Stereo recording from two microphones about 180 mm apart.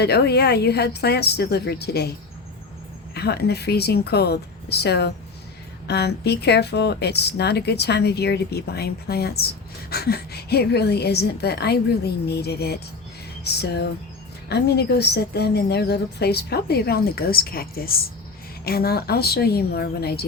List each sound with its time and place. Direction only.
0.0 s a woman's voice: 65° left (ahead or behind)
3.2 s a woman's voice: 65° left (ahead or behind)